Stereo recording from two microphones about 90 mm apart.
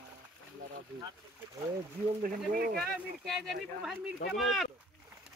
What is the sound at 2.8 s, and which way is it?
Speech, centre (ahead or behind).